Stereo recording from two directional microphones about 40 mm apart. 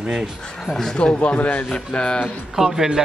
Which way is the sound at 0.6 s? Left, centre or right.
Centre.